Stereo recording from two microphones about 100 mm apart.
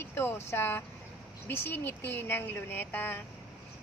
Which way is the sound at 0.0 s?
25° left (ahead or behind).